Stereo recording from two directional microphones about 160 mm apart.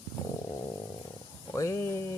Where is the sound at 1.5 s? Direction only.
20° left (ahead or behind).